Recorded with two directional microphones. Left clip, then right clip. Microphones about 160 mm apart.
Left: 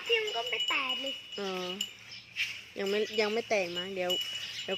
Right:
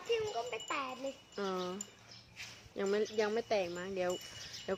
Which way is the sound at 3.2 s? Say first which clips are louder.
Left 4 dB; 25° left (ahead or behind).